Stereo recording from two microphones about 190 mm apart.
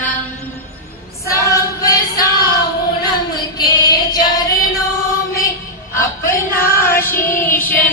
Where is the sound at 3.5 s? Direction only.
20° left (ahead or behind).